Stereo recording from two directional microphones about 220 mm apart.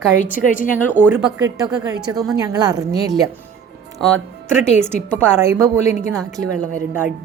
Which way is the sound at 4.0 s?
Centre (ahead or behind).